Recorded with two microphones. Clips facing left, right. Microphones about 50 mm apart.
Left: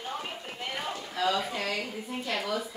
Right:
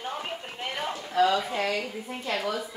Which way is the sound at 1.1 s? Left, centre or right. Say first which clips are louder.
Right 6 dB; right.